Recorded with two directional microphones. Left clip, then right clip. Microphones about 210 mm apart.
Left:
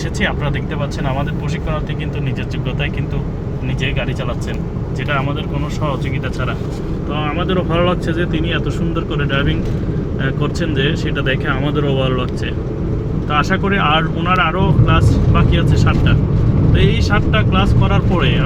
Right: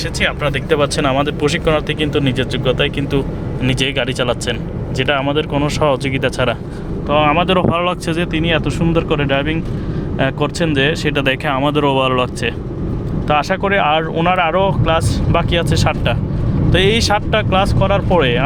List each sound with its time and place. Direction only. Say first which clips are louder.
0.7 s speech: right 8 dB; 50° right (ahead or behind)
3.7 s speech: right 5 dB; 55° right (ahead or behind)